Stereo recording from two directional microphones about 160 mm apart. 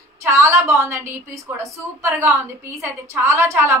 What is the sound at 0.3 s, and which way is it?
A woman's voice, 15° right (ahead or behind).